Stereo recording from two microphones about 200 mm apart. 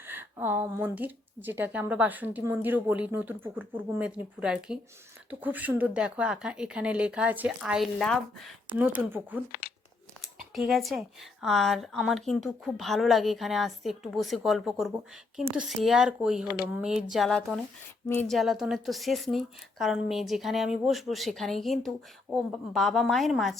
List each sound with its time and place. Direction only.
0.0 s a woman's voice: 10° right (ahead or behind)
8.8 s a woman's voice: 10° right (ahead or behind)
9.5 s tearing: 50° left (ahead or behind)
10.2 s speech: centre (ahead or behind)